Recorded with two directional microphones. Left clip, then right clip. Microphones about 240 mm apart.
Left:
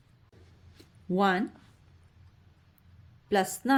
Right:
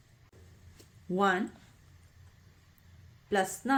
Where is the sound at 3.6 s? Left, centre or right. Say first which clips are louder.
Left 3 dB; left.